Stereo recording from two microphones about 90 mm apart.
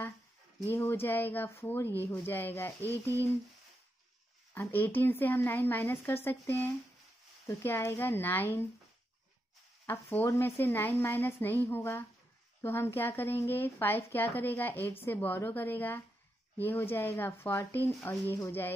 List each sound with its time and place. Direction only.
0.7 s a woman's voice: 25° left (ahead or behind)
4.6 s a woman's voice: 25° left (ahead or behind)
10.2 s a woman's voice: 30° left (ahead or behind)